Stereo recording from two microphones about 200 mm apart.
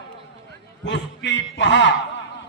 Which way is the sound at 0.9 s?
65° left (ahead or behind).